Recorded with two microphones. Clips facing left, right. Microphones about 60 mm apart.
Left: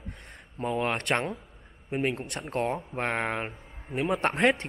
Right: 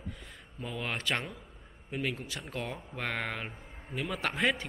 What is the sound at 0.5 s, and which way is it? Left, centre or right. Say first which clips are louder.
Speech: left 8 dB; left.